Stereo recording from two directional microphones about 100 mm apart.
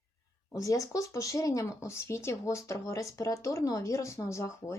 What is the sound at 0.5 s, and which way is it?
Speech, 35° left (ahead or behind).